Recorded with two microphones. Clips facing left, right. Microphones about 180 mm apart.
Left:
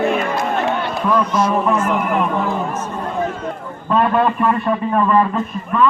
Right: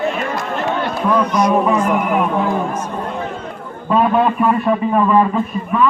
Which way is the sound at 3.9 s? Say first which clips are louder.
Right 1 dB; 5° right (ahead or behind).